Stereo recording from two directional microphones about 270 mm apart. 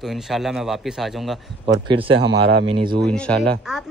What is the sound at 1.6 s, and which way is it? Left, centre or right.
Speech, centre.